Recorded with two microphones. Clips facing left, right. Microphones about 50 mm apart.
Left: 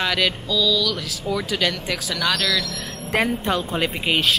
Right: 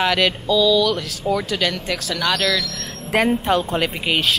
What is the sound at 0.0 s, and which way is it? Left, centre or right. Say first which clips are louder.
Speech: right 3 dB; centre.